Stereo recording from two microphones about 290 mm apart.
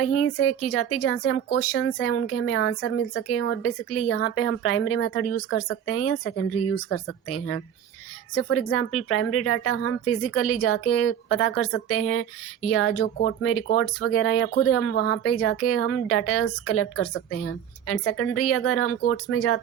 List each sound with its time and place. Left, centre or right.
0.0 s speech: left